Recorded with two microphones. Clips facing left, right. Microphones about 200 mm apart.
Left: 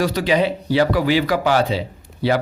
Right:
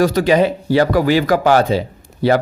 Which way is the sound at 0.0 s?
45° right (ahead or behind).